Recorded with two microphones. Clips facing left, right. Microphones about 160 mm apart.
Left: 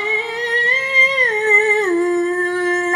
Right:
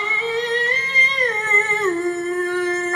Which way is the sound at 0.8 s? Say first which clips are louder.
Left 4 dB; 50° left (ahead or behind).